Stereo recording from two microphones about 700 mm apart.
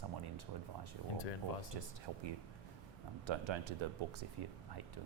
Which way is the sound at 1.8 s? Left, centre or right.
Right.